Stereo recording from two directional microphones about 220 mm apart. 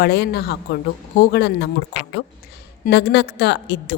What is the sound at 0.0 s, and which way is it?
A woman's voice, 50° left (ahead or behind).